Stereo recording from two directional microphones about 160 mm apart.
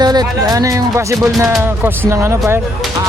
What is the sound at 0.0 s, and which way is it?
Speech, 25° right (ahead or behind).